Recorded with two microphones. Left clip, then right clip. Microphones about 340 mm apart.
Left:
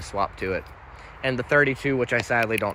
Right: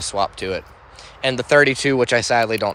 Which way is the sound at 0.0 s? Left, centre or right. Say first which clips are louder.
Right 5 dB; centre.